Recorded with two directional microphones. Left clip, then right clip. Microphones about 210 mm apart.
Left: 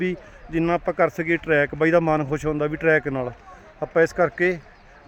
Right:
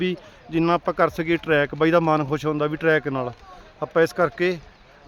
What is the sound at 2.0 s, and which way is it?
Speech, 5° right (ahead or behind).